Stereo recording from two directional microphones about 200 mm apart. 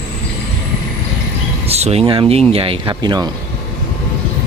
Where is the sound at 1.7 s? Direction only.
30° right (ahead or behind).